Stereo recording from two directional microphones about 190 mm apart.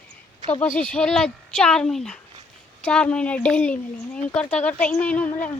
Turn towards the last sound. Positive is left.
turn(degrees=5)  # may be behind; listen again after turning